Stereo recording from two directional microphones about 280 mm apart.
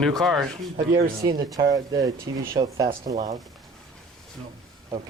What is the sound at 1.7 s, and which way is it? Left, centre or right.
Speech, centre.